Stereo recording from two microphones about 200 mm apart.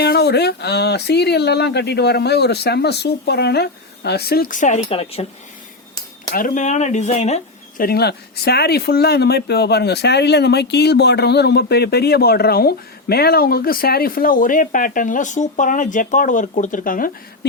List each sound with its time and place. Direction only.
0.0 s speech: 55° left (ahead or behind); by 5.2 s 30° left (ahead or behind)
6.3 s speech: 40° left (ahead or behind)
7.8 s speech: 50° left (ahead or behind)